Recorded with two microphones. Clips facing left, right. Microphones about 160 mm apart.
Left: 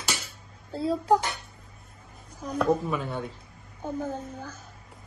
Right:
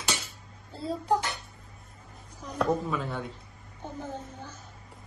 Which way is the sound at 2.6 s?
Centre (ahead or behind).